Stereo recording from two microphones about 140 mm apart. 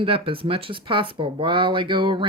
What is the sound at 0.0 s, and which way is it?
Speech, 40° right (ahead or behind).